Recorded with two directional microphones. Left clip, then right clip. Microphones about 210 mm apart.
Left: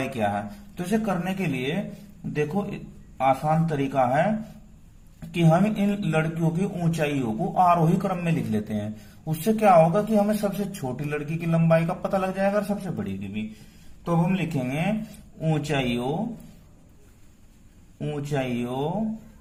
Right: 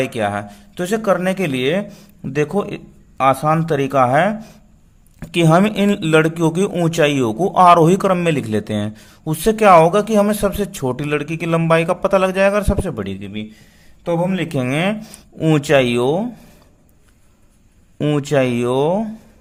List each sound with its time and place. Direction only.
0.0 s speech: 40° right (ahead or behind)
18.0 s speech: 55° right (ahead or behind)